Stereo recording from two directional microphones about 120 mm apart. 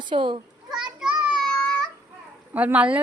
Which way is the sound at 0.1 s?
40° right (ahead or behind).